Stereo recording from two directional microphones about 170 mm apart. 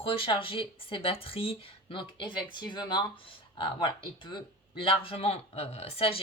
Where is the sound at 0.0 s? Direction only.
30° left (ahead or behind).